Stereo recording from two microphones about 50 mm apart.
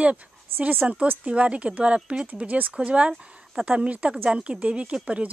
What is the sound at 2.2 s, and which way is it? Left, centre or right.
A woman's voice, right.